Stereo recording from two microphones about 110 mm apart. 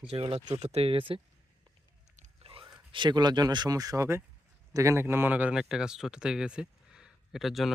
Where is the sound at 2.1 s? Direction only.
55° right (ahead or behind).